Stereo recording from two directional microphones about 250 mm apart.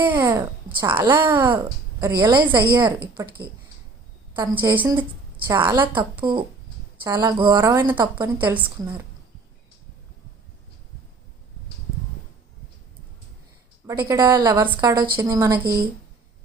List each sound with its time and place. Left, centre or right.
0.1 s a woman's voice: centre
4.4 s a woman's voice: centre
4.8 s a woman's voice: centre
8.4 s a woman's voice: centre
13.8 s a woman's voice: centre
15.6 s speech: right